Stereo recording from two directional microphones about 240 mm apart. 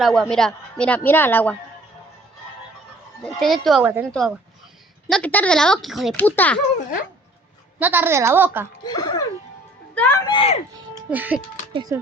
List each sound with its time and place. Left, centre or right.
0.0 s speech: centre
3.3 s speech: centre
5.0 s speech: centre
7.8 s a woman's voice: centre
8.8 s speech: centre
11.1 s a woman's voice: centre
11.7 s speech: centre